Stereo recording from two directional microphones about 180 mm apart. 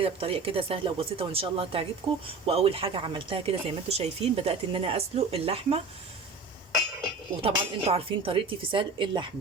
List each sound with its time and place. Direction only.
0.0 s speech: 30° right (ahead or behind)
7.4 s speech: 30° right (ahead or behind)